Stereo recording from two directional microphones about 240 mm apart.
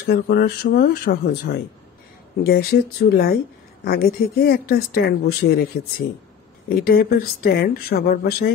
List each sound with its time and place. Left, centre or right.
0.0 s speech: left